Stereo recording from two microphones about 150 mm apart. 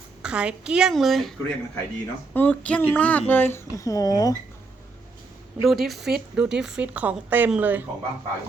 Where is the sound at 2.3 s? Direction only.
10° left (ahead or behind).